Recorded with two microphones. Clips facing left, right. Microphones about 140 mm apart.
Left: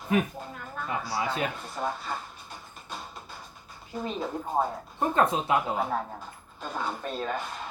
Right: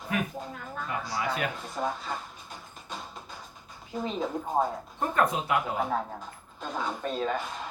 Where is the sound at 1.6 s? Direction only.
5° right (ahead or behind).